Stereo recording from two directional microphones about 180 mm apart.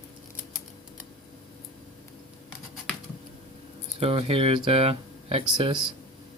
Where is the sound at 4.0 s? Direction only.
30° right (ahead or behind).